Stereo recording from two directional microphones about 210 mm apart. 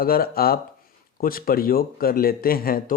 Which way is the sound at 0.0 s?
45° left (ahead or behind).